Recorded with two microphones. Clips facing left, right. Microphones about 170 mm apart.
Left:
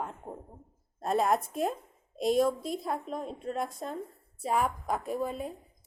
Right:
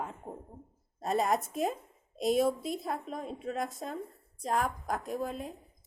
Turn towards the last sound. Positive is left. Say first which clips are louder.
# left 3 dB
turn(degrees=0)  # may be behind; listen again after turning